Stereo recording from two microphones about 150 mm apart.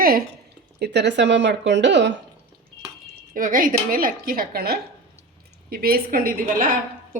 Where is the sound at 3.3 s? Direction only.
65° right (ahead or behind).